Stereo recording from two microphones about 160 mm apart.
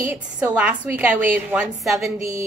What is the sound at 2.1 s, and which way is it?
Speech, 20° right (ahead or behind).